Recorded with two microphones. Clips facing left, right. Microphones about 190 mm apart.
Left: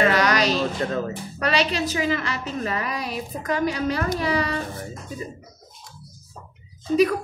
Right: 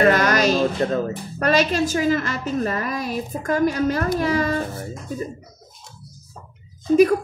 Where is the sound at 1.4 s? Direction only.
45° right (ahead or behind).